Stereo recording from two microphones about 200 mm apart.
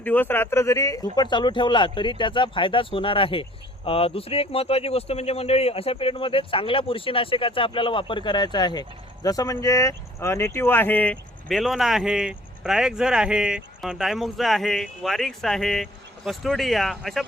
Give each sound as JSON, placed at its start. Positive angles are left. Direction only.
{"t": 0.0, "sound": "speech", "side_deg": 10}